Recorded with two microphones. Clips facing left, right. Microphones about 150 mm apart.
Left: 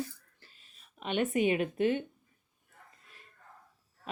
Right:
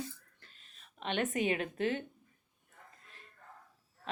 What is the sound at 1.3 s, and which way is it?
Speech, 35° right (ahead or behind).